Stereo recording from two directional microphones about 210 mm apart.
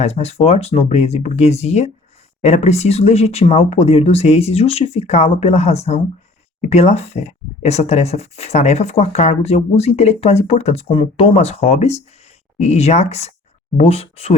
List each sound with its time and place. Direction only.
0.0 s speech: 30° left (ahead or behind)